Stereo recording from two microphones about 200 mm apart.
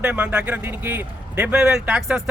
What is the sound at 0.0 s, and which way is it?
A man's voice, 10° right (ahead or behind).